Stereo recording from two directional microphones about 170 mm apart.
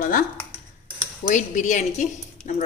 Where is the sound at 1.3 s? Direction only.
45° left (ahead or behind).